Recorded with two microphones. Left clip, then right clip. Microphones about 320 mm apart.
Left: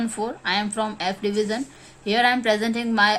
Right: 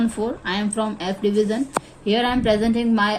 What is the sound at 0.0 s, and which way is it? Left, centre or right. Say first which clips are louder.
A woman's voice: right 2 dB; centre.